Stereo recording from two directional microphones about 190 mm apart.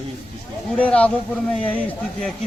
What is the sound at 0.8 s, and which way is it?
Speech, 5° left (ahead or behind).